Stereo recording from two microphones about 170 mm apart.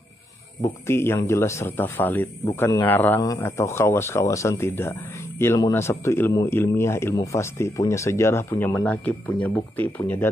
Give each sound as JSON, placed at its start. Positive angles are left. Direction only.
{"t": 0.8, "sound": "a man's voice", "side_deg": 15}